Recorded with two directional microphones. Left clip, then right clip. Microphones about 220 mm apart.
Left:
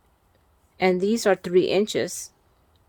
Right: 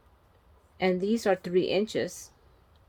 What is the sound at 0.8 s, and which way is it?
Speech, 55° left (ahead or behind).